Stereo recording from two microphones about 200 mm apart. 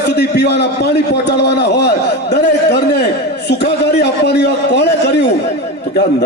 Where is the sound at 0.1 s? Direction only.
60° left (ahead or behind).